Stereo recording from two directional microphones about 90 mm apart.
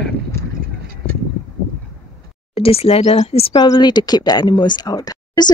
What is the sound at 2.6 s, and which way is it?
Speech, 90° left.